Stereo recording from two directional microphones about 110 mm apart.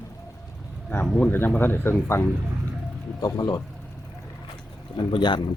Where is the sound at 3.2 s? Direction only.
40° left (ahead or behind).